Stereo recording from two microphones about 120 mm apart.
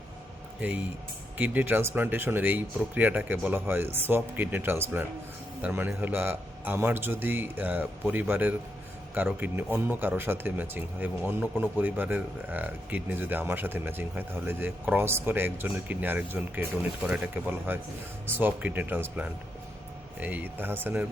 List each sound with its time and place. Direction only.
1.4 s speech: 15° right (ahead or behind)
17.0 s speech: 5° right (ahead or behind)
17.3 s speech: 15° right (ahead or behind)